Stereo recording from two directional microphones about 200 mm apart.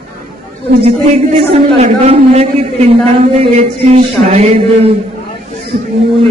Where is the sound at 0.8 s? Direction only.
30° right (ahead or behind).